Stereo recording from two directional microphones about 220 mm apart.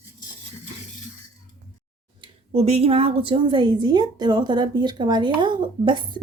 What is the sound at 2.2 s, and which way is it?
A woman's voice, 25° right (ahead or behind).